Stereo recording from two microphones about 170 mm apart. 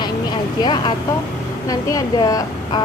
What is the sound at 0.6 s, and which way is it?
A woman's voice, 25° left (ahead or behind).